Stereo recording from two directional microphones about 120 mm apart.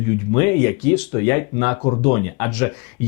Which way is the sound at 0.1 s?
20° left (ahead or behind).